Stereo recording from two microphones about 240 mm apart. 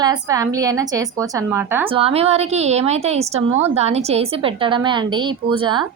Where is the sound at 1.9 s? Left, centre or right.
Right.